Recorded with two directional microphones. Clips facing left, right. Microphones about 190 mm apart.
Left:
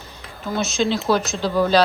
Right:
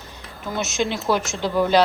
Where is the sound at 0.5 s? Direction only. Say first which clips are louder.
Left 3 dB; 20° right (ahead or behind).